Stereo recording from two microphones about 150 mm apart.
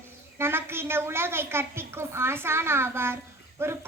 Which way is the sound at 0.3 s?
15° right (ahead or behind).